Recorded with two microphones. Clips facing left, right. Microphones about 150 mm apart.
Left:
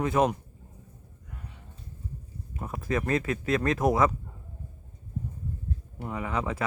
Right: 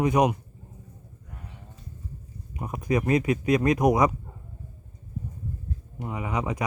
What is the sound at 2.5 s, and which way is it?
Speech, 15° right (ahead or behind).